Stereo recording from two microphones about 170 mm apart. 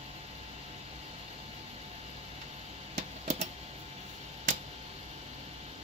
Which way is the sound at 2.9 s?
40° right (ahead or behind).